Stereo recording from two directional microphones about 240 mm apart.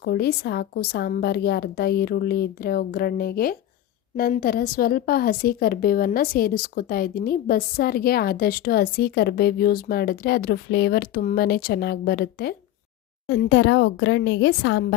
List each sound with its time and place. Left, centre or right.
0.0 s a woman's voice: left